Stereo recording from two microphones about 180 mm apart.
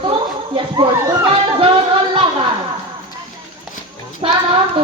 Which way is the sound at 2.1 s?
25° right (ahead or behind).